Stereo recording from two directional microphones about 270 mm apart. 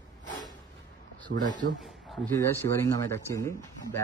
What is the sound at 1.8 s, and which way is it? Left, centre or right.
A man's voice, centre.